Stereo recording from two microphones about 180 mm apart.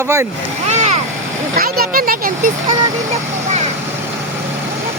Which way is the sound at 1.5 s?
55° right (ahead or behind).